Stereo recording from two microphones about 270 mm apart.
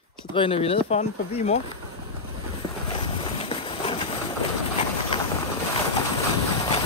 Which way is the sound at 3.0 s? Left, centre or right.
Left.